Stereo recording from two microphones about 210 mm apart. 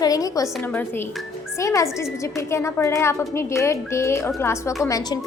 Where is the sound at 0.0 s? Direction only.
15° left (ahead or behind).